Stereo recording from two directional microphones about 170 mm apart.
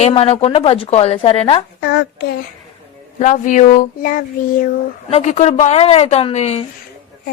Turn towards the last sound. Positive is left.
turn(degrees=40)  # may be behind; listen again after turning